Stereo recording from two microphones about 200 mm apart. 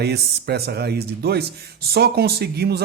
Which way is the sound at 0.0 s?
55° right (ahead or behind).